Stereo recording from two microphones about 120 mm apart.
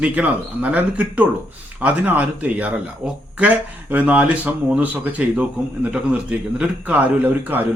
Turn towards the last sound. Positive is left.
turn(degrees=-10)  # may be behind; listen again after turning